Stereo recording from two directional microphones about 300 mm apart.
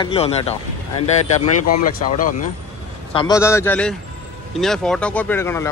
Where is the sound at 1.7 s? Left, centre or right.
Left.